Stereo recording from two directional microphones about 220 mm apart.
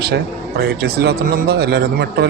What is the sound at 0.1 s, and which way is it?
A man's voice, 45° right (ahead or behind).